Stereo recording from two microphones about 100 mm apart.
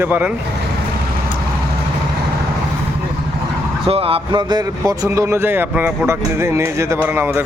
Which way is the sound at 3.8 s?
70° right (ahead or behind).